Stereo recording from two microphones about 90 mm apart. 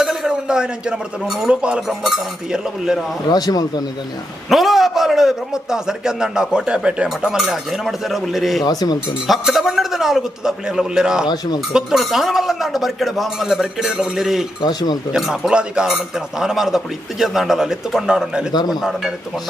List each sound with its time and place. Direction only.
0.0 s a man's voice: 5° right (ahead or behind)
3.3 s speech: 45° left (ahead or behind)
4.5 s a man's voice: centre (ahead or behind)
8.6 s speech: 50° left (ahead or behind)
9.3 s a man's voice: centre (ahead or behind)
14.6 s speech: 50° left (ahead or behind)
15.1 s a man's voice: 5° right (ahead or behind)